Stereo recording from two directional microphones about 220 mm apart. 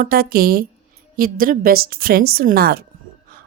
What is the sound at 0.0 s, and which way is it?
A woman's voice, 40° right (ahead or behind).